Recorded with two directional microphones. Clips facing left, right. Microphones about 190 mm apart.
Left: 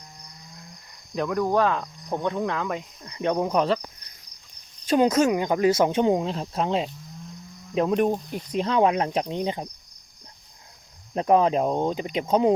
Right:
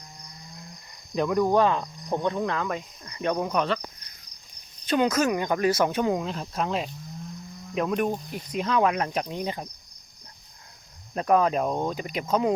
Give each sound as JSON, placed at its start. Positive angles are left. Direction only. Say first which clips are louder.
{"t": 1.1, "sound": "cricket", "louder": "right 1 dB", "side_deg": -5}
{"t": 2.1, "sound": "speech", "louder": "even", "side_deg": 5}
{"t": 3.5, "sound": "speech", "louder": "left 3 dB", "side_deg": 35}
{"t": 4.9, "sound": "speech", "louder": "left 3 dB", "side_deg": 35}
{"t": 5.2, "sound": "speech", "louder": "left 3 dB", "side_deg": 15}
{"t": 11.1, "sound": "speech", "louder": "left 2 dB", "side_deg": 25}